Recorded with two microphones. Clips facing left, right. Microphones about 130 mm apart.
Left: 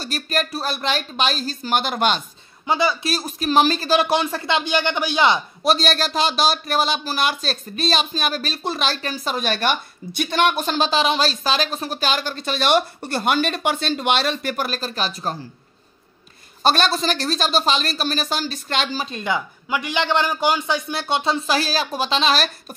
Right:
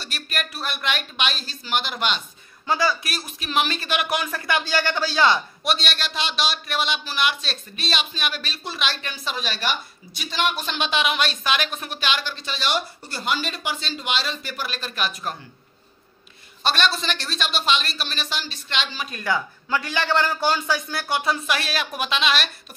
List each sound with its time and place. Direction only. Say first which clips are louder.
0.0 s speech: left 8 dB; 40° left (ahead or behind)
2.6 s a man's voice: left 2 dB; 20° left (ahead or behind)
3.2 s a man's voice: left 7 dB; 40° left (ahead or behind); by 5.4 s 20° left (ahead or behind)
5.6 s speech: left 7 dB; 40° left (ahead or behind)
16.6 s speech: left 5 dB; 40° left (ahead or behind)
19.0 s a man's voice: left 1 dB; 20° left (ahead or behind); by 22.5 s 35° left (ahead or behind)